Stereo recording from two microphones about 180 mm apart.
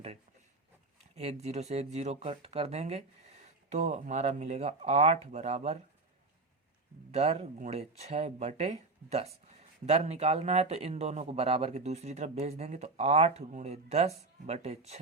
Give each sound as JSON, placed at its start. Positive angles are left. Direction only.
{"t": 1.1, "sound": "speech", "side_deg": -35}
{"t": 7.1, "sound": "speech", "side_deg": -35}